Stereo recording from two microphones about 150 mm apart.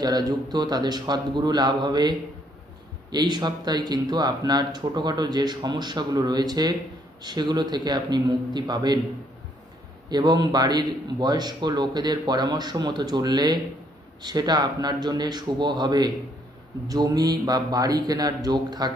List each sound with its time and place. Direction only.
0.0 s speech: 25° right (ahead or behind)
10.0 s speech: 30° right (ahead or behind)